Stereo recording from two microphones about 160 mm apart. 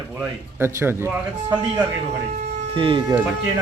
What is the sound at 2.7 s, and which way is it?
Speech, 35° right (ahead or behind).